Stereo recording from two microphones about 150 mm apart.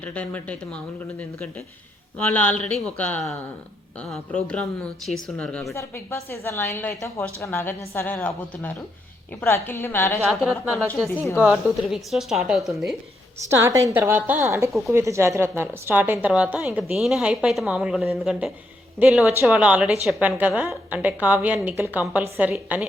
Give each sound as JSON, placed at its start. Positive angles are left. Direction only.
{"t": 0.0, "sound": "a woman's voice", "side_deg": 10}
{"t": 5.7, "sound": "a woman's voice", "side_deg": 15}
{"t": 10.2, "sound": "speech", "side_deg": 0}
{"t": 13.5, "sound": "a woman's voice", "side_deg": -20}